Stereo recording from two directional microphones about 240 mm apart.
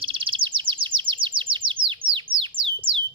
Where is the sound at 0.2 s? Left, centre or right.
Right.